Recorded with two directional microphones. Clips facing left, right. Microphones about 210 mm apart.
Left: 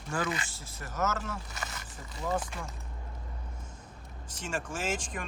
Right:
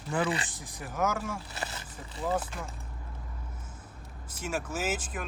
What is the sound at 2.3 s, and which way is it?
Speech, 5° right (ahead or behind).